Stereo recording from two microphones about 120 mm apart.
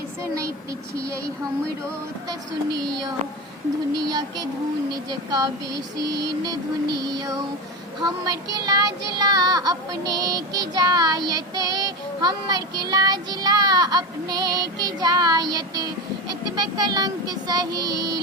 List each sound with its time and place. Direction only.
3.9 s child singing: 35° right (ahead or behind)